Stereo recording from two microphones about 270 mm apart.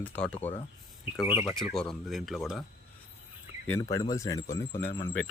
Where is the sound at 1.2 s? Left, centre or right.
Centre.